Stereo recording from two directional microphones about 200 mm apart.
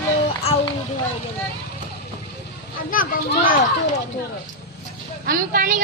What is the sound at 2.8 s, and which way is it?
Speech, 45° left (ahead or behind).